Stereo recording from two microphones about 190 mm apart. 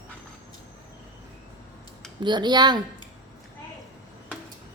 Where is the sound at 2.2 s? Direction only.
25° right (ahead or behind).